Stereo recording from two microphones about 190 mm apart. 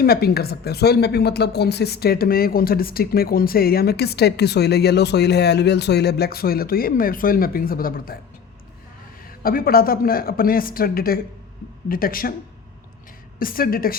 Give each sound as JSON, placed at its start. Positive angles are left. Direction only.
{"t": 0.0, "sound": "speech", "side_deg": 55}
{"t": 9.4, "sound": "speech", "side_deg": 50}
{"t": 13.4, "sound": "speech", "side_deg": 50}